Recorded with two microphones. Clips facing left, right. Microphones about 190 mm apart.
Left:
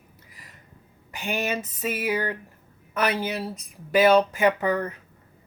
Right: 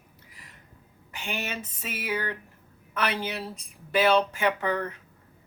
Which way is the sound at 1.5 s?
10° left (ahead or behind).